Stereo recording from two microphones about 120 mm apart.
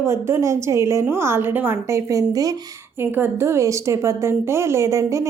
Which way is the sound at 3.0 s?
15° right (ahead or behind).